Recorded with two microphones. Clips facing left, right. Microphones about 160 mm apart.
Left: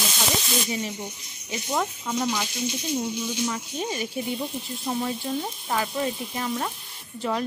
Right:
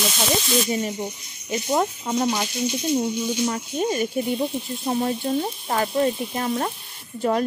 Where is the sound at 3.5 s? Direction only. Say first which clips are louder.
Right 6 dB; 50° right (ahead or behind).